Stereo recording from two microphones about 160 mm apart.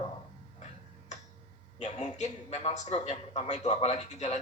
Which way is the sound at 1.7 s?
45° left (ahead or behind).